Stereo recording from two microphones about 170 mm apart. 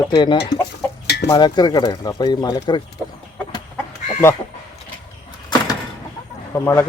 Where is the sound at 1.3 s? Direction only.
25° left (ahead or behind).